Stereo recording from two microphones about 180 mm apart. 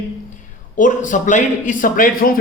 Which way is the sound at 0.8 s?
45° left (ahead or behind).